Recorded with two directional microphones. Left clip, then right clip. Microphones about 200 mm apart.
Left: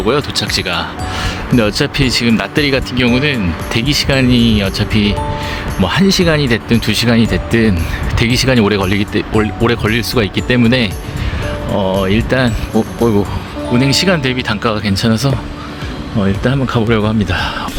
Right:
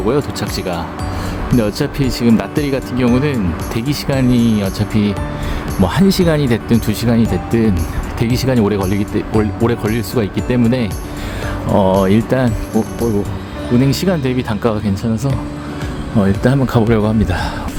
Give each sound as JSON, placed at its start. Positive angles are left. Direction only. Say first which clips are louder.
{"t": 0.0, "sound": "speech", "louder": "left 3 dB", "side_deg": -5}
{"t": 11.9, "sound": "speech", "louder": "right 1 dB", "side_deg": -20}
{"t": 12.3, "sound": "speech", "louder": "left 2 dB", "side_deg": -10}
{"t": 16.2, "sound": "speech", "louder": "even", "side_deg": -15}